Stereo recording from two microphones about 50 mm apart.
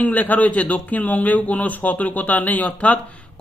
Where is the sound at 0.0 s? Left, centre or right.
Left.